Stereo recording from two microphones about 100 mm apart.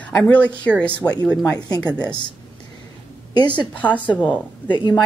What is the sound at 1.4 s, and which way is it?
Speech, 30° left (ahead or behind).